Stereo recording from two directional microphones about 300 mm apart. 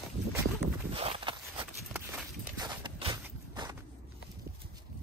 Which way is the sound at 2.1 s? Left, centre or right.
Centre.